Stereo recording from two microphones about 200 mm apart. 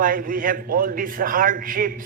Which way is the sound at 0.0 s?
45° right (ahead or behind).